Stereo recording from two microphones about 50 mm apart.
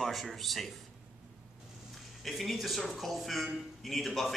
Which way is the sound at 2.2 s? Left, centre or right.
Centre.